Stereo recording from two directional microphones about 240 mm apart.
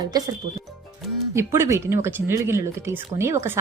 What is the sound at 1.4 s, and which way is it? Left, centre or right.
A woman's voice, centre.